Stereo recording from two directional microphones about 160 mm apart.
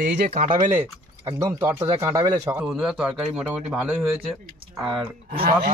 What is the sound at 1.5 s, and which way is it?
A man's voice, 15° right (ahead or behind).